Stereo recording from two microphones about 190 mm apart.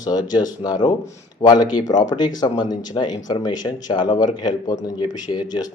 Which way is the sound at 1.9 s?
20° left (ahead or behind).